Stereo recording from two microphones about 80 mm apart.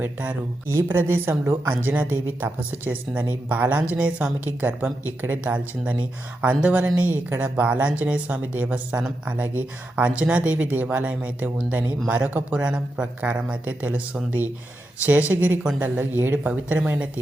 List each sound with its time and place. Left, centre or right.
0.0 s speech: centre
0.7 s a woman's voice: right